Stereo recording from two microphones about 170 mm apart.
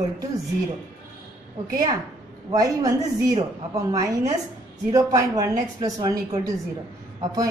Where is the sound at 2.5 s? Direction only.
20° right (ahead or behind).